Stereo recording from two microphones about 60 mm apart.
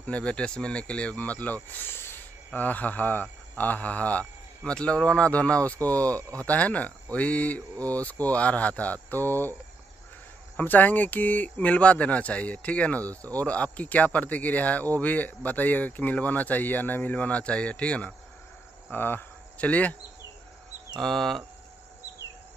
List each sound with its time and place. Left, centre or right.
0.0 s speech: centre
18.9 s cricket: left
19.6 s speech: left
21.0 s speech: centre